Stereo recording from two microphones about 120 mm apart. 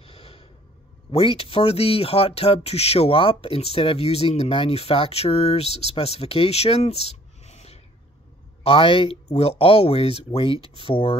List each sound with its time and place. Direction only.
0.0 s snort: 50° left (ahead or behind)
1.1 s speech: 50° left (ahead or behind)
8.6 s speech: 50° left (ahead or behind)